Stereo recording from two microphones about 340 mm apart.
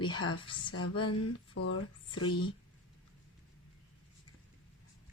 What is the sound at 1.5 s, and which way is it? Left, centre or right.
Speech, left.